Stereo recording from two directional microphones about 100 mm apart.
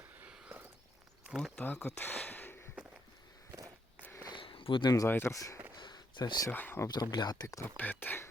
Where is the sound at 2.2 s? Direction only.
15° left (ahead or behind).